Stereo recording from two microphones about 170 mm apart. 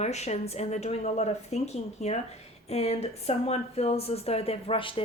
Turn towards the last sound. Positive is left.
turn(degrees=30)  # may be behind; listen again after turning